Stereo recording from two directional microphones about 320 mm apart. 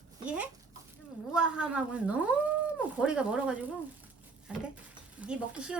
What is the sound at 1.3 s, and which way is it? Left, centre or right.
Speech, centre.